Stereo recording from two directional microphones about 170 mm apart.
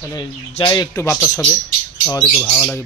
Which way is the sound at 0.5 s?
25° left (ahead or behind).